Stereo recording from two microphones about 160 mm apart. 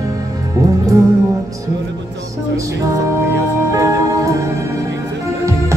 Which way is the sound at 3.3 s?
20° right (ahead or behind).